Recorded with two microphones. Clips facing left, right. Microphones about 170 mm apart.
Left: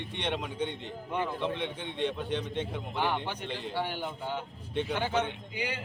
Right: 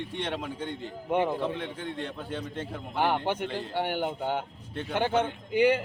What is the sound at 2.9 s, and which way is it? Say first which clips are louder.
A man's voice: right 6 dB; 55° right (ahead or behind).